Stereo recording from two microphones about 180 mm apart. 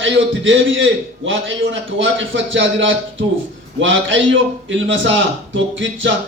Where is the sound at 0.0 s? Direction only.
90° right.